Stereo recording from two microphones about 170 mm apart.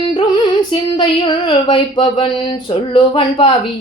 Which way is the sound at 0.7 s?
30° left (ahead or behind).